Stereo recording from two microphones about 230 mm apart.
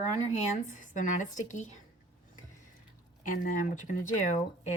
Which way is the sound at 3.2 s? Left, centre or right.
Left.